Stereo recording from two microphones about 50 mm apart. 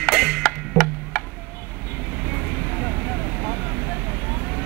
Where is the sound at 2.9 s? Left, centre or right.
Left.